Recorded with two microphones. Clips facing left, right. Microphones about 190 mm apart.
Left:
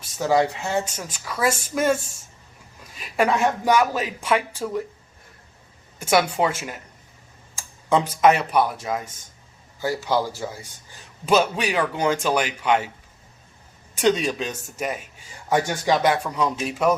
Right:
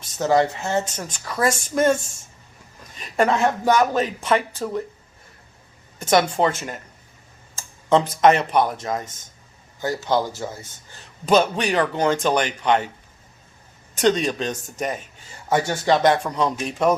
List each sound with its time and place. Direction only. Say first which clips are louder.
0.0 s a man's voice: right 1 dB; 10° left (ahead or behind)
6.0 s a man's voice: right 2 dB; 10° left (ahead or behind)
7.9 s a man's voice: right 2 dB; 10° left (ahead or behind)
13.9 s a man's voice: right 1 dB; 10° left (ahead or behind)